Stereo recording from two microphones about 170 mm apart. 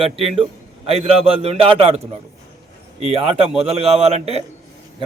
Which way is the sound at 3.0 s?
35° right (ahead or behind).